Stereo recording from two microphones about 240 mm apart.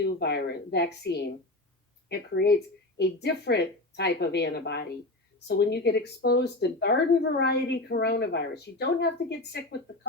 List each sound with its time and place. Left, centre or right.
0.0 s speech: left